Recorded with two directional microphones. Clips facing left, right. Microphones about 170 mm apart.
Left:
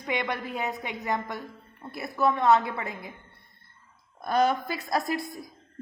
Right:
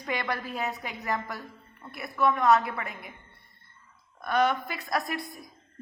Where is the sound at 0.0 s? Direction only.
20° left (ahead or behind).